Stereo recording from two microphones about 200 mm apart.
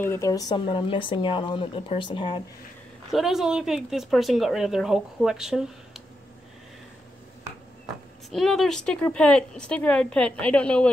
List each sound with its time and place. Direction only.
0.1 s speech: 15° left (ahead or behind)
3.1 s a woman's voice: centre (ahead or behind)
8.3 s a woman's voice: centre (ahead or behind)